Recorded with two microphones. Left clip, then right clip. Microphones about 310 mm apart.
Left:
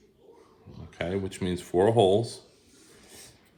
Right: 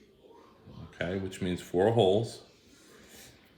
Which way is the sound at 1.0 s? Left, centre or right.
Centre.